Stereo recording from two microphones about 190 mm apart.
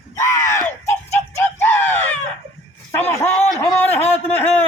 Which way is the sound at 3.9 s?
35° left (ahead or behind).